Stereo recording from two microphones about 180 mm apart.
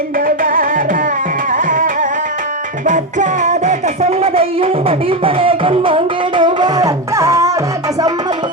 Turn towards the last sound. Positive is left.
turn(degrees=-15)  # may be behind; listen again after turning